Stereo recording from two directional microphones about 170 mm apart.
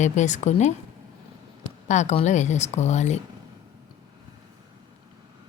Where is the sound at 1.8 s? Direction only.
45° left (ahead or behind).